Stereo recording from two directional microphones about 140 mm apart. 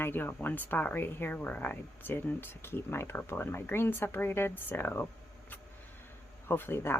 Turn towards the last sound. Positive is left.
turn(degrees=15)  # may be behind; listen again after turning